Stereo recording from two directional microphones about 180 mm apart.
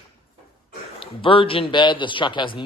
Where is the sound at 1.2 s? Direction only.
30° left (ahead or behind).